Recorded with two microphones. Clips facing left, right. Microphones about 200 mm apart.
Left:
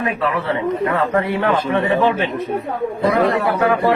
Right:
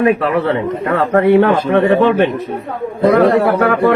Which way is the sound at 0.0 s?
60° right (ahead or behind).